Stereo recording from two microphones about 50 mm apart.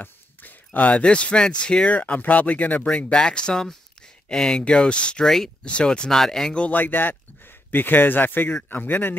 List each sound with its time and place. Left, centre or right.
0.0 s a sound: left
0.7 s speech: left
1.9 s speech: left
5.2 s speech: centre
6.7 s speech: left